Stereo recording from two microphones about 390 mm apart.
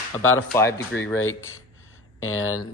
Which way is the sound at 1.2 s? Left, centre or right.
Left.